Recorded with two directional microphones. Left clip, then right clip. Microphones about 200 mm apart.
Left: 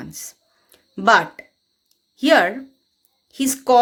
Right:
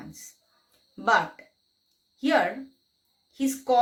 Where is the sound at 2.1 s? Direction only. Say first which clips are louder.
Left 9 dB; 45° left (ahead or behind).